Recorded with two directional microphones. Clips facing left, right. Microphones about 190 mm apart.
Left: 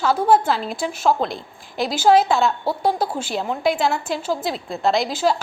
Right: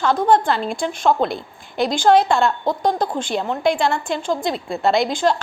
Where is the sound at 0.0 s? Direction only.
5° left (ahead or behind).